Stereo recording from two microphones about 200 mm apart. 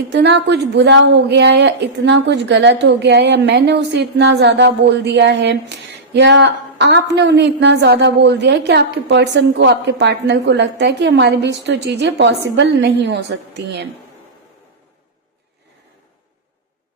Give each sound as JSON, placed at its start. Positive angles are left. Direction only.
{"t": 0.1, "sound": "a woman's voice", "side_deg": -60}